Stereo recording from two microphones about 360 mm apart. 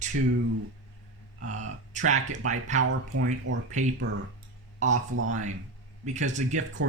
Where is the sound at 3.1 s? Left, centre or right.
Right.